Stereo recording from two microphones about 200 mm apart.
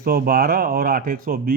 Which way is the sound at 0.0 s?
50° right (ahead or behind).